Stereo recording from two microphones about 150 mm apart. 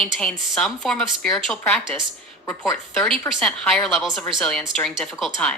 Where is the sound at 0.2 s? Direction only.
Centre (ahead or behind).